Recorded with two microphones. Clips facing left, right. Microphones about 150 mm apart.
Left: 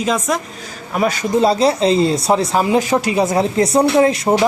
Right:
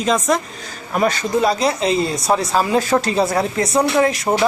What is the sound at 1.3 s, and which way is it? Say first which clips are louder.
Speech: left 7 dB; 25° left (ahead or behind).